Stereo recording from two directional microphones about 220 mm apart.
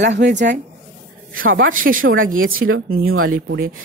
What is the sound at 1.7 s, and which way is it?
Speech, 40° right (ahead or behind).